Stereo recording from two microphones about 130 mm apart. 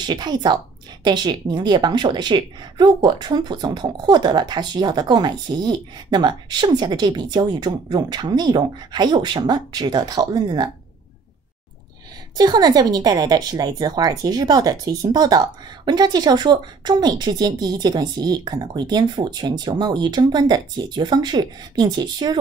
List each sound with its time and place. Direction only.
0.0 s a woman's voice: 35° right (ahead or behind)
12.4 s a woman's voice: 30° right (ahead or behind)